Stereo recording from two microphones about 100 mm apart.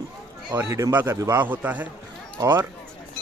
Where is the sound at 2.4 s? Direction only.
40° right (ahead or behind).